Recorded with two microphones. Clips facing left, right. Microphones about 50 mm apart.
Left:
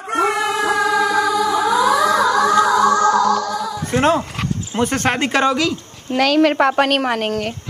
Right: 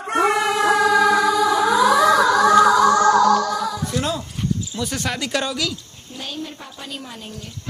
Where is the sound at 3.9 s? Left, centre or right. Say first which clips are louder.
Left 8 dB; left.